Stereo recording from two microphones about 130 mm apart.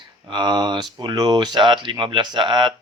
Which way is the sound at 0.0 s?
35° right (ahead or behind).